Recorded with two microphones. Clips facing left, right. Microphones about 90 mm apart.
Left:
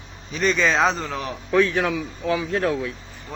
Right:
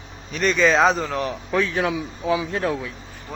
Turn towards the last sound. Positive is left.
turn(degrees=0)  # may be behind; listen again after turning